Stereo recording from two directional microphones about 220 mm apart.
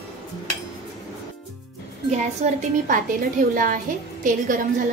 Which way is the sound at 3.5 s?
40° right (ahead or behind).